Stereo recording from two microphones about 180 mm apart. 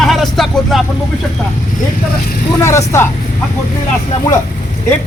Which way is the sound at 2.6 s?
15° left (ahead or behind).